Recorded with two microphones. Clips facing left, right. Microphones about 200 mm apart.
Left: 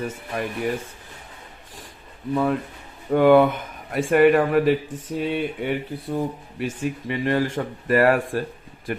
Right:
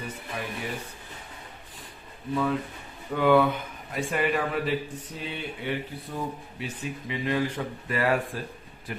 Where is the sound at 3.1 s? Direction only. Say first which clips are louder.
Left 6 dB; 50° left (ahead or behind).